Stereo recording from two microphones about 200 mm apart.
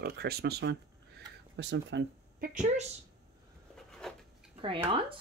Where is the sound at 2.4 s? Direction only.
40° right (ahead or behind).